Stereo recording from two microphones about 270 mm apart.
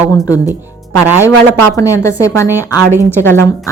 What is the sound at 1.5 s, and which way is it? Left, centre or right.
A woman's voice, centre.